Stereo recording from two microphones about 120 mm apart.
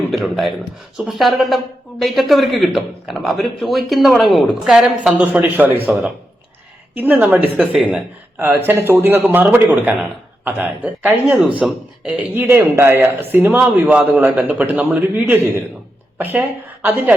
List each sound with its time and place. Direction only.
0.1 s speech: centre (ahead or behind)
6.9 s speech: 15° right (ahead or behind)